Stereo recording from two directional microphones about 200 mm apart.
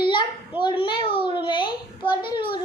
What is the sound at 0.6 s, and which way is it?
A child's voice, 25° left (ahead or behind).